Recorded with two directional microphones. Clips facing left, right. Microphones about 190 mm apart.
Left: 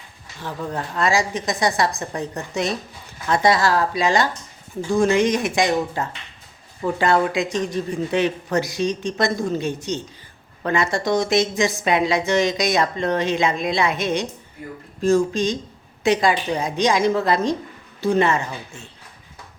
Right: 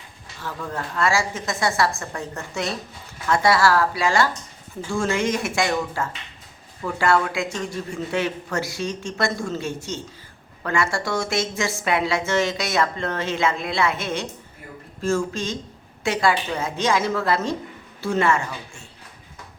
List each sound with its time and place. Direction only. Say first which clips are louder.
0.4 s a woman's voice: left 3 dB; 20° left (ahead or behind)